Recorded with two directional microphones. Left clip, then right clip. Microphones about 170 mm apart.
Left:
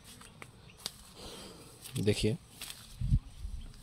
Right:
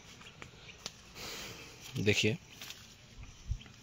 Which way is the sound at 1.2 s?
25° left (ahead or behind).